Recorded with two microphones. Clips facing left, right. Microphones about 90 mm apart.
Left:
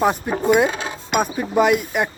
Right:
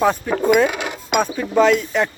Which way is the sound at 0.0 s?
15° left (ahead or behind).